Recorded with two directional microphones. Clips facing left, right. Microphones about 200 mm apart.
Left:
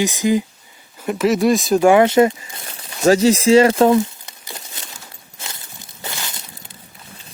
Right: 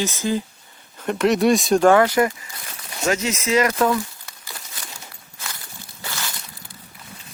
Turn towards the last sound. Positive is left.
turn(degrees=20)  # may be behind; listen again after turning